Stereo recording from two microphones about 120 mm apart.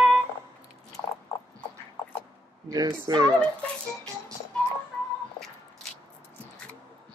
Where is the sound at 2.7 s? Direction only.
35° right (ahead or behind).